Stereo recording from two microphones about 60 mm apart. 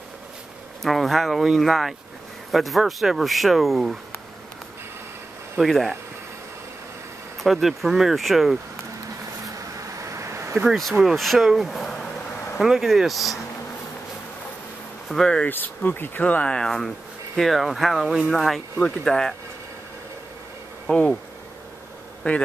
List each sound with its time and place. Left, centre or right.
0.8 s speech: centre
5.6 s speech: centre
7.3 s speech: centre
9.9 s a sound: right
10.7 s speech: centre
15.4 s speech: left
16.5 s speech: centre
20.9 s speech: centre
22.2 s speech: left